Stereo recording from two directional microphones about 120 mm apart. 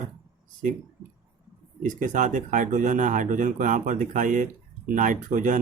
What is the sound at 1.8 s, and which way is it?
Speech, 90° right.